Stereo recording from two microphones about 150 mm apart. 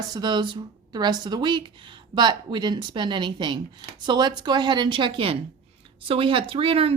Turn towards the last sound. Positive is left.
turn(degrees=-40)  # may be behind; listen again after turning